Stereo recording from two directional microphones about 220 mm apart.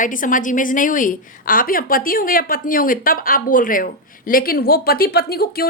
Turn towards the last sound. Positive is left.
turn(degrees=45)  # may be behind; listen again after turning